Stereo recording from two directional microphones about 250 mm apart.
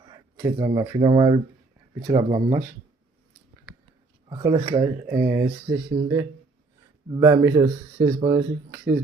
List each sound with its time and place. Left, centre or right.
0.0 s speech: centre
4.3 s speech: centre
7.2 s speech: centre